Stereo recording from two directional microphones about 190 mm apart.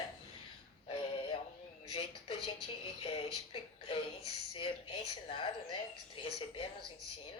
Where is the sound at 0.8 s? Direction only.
25° left (ahead or behind).